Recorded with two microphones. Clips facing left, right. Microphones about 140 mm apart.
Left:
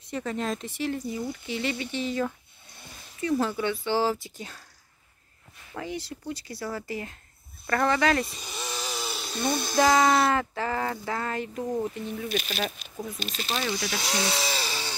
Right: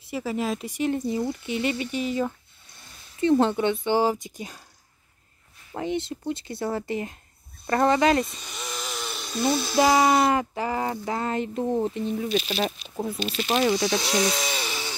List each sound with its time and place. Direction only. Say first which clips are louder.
0.0 s speech: right 3 dB; 5° right (ahead or behind)
3.2 s speech: right 6 dB; 25° right (ahead or behind)
5.7 s speech: right 6 dB; 25° right (ahead or behind)
8.4 s a sound: even; 5° left (ahead or behind)
9.8 s speech: right 1 dB; 5° right (ahead or behind)
10.2 s speech: right 2 dB; 15° right (ahead or behind)